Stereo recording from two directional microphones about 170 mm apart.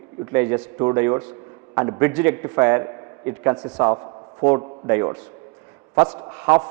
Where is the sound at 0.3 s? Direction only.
20° right (ahead or behind).